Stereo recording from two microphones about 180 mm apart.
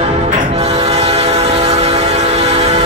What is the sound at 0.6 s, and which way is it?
Train, 35° right (ahead or behind).